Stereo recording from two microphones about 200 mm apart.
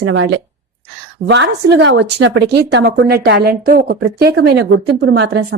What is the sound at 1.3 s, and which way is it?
A woman's voice, 60° right (ahead or behind).